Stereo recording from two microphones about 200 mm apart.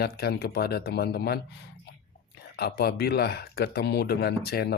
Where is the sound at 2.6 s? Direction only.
55° left (ahead or behind).